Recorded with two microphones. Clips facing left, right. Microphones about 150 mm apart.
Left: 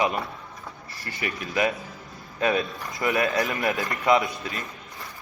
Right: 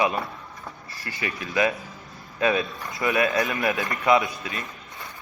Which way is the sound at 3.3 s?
20° right (ahead or behind).